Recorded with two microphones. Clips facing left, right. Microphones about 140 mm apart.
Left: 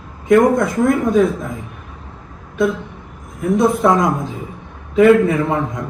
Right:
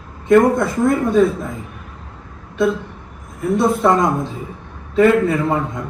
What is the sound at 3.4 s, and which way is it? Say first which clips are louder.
A man's voice: left 1 dB; centre (ahead or behind).